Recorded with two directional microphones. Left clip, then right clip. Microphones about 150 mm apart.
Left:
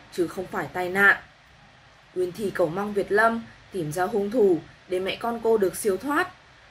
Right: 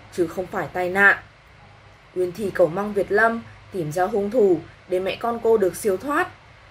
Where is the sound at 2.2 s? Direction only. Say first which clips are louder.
Right 5 dB; 5° right (ahead or behind).